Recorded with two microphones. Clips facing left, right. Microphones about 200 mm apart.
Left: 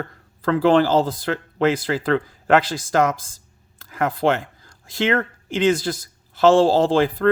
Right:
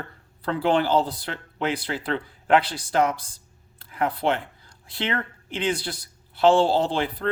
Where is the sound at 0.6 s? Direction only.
90° left.